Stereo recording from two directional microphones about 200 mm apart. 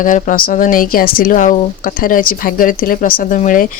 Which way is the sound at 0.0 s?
40° left (ahead or behind).